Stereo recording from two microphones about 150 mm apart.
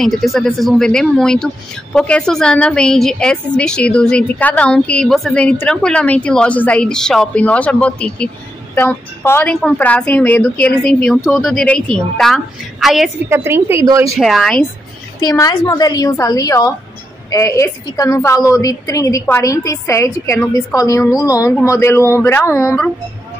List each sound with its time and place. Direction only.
0.0 s a woman's voice: centre (ahead or behind)
13.3 s speech: 15° right (ahead or behind)
14.1 s a woman's voice: centre (ahead or behind)
15.1 s a woman's voice: 25° left (ahead or behind)